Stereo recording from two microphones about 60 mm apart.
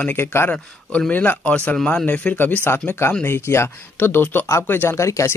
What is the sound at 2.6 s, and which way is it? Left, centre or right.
Speech, left.